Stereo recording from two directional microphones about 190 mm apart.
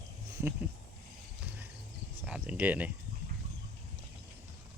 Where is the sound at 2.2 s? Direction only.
5° right (ahead or behind).